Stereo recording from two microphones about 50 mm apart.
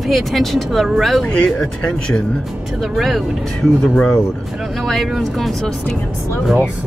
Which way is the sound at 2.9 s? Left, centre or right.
Centre.